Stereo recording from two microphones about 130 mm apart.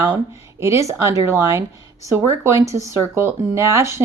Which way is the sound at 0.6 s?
25° right (ahead or behind).